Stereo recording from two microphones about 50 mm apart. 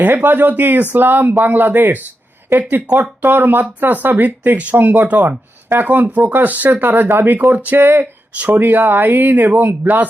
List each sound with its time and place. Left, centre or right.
0.0 s speech: right
7.3 s speech: right
7.8 s speech: right